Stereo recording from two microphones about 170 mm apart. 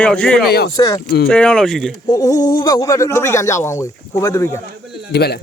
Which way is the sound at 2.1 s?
20° left (ahead or behind).